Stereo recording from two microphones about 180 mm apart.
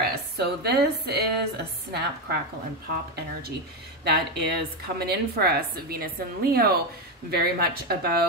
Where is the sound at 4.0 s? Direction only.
65° right (ahead or behind).